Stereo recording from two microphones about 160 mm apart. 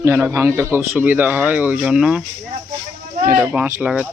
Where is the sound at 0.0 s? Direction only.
15° right (ahead or behind).